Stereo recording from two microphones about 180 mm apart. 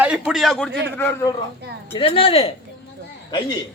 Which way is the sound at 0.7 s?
75° right (ahead or behind).